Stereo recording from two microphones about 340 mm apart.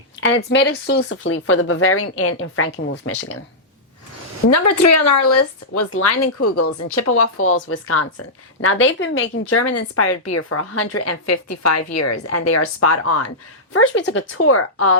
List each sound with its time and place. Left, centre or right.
0.2 s speech: left
4.4 s speech: left